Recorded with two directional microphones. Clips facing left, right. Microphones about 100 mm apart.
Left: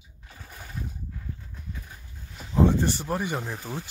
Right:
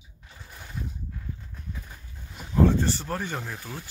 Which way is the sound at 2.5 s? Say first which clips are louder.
Even; 15° left (ahead or behind).